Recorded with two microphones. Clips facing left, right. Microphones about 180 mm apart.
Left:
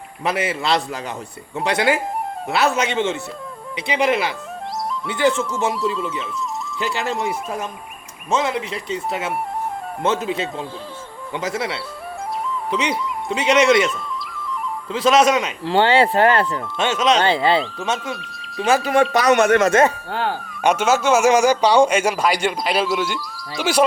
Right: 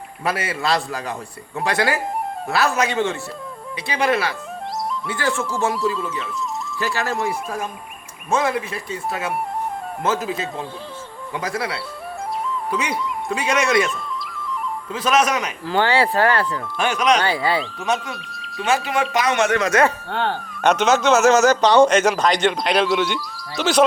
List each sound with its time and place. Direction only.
0.3 s speech: 20° left (ahead or behind)
18.1 s speech: centre (ahead or behind)
19.1 s speech: 40° left (ahead or behind)
20.1 s speech: 5° left (ahead or behind)